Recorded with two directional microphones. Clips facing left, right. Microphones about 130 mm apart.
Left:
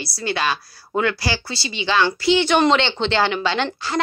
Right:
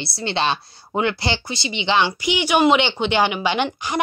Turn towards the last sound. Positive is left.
turn(degrees=-15)  # may be behind; listen again after turning